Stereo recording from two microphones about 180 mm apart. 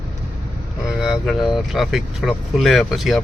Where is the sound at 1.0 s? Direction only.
Centre (ahead or behind).